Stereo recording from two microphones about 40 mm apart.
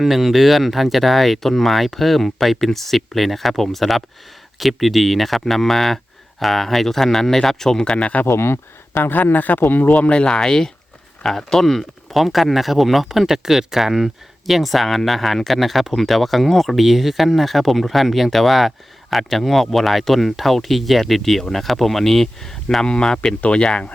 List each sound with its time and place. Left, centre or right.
0.0 s speech: centre
7.9 s speech: left
8.3 s speech: left
9.0 s speech: left
9.9 s speech: left